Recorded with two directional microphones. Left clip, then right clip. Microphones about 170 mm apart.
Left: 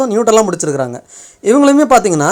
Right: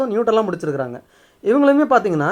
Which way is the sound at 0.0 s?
35° left (ahead or behind).